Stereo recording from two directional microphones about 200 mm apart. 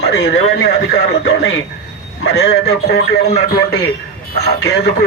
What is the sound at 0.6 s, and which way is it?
Speech, 55° left (ahead or behind).